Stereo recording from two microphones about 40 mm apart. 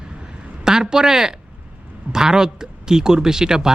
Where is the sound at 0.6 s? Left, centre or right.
Centre.